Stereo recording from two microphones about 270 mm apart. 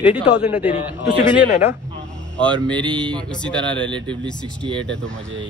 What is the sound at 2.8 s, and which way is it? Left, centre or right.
Speech, centre.